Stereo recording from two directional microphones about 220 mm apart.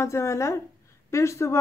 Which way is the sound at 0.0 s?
15° left (ahead or behind).